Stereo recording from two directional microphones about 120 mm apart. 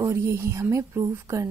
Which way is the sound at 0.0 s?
25° right (ahead or behind).